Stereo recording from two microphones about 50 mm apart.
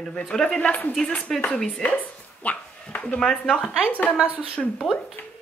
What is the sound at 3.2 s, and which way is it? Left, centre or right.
Speech, centre.